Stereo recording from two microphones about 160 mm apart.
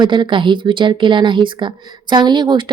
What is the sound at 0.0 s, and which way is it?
Speech, 30° right (ahead or behind).